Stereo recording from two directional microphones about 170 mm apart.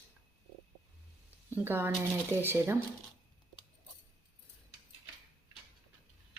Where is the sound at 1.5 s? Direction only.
10° right (ahead or behind).